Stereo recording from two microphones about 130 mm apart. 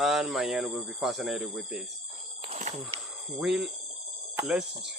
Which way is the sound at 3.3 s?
5° right (ahead or behind).